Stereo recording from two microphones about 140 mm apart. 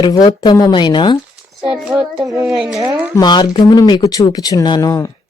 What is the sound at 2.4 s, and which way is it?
Speech, centre (ahead or behind).